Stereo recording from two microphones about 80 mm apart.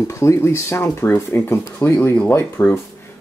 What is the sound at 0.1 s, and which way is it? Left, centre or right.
Speech, left.